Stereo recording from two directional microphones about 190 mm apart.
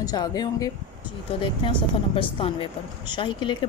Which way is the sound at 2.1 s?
30° left (ahead or behind).